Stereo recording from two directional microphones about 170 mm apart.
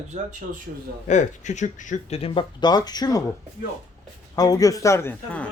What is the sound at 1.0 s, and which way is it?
Speech, 45° left (ahead or behind).